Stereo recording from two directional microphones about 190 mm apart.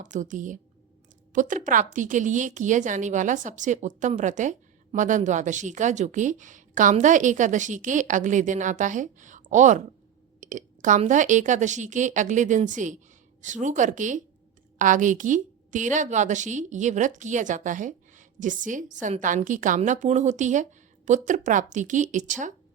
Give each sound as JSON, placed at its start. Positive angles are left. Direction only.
{"t": 0.0, "sound": "a woman's voice", "side_deg": -40}